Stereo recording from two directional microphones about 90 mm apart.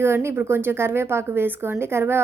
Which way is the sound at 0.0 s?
30° right (ahead or behind).